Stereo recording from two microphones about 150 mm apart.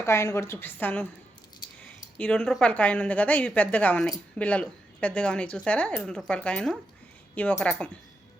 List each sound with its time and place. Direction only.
0.0 s speech: 20° left (ahead or behind)